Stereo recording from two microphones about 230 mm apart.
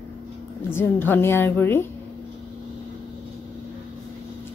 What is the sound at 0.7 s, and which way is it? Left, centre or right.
Speech, centre.